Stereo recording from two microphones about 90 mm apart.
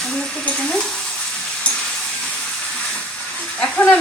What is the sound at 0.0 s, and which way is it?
Stir, 10° left (ahead or behind).